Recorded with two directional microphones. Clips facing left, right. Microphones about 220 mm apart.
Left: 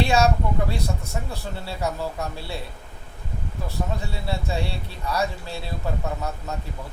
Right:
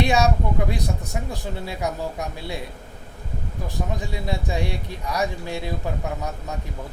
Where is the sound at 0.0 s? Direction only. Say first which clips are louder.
Even; 15° right (ahead or behind).